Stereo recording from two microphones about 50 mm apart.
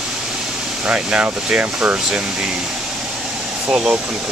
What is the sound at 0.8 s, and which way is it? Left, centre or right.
Speech, right.